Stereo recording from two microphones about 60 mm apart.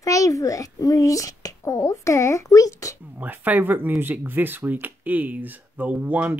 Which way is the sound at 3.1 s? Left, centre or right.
Right.